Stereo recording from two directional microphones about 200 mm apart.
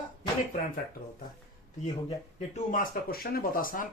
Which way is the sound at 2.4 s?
40° left (ahead or behind).